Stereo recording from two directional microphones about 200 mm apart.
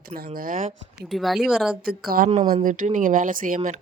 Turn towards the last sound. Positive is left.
turn(degrees=-45)  # may be behind; listen again after turning